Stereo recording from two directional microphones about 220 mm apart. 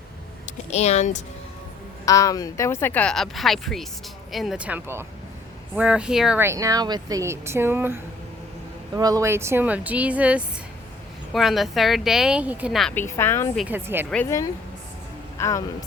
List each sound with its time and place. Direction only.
0.7 s speech: 30° left (ahead or behind)
2.0 s speech: 15° left (ahead or behind)
13.6 s speech: 10° right (ahead or behind)
14.1 s speech: 10° left (ahead or behind)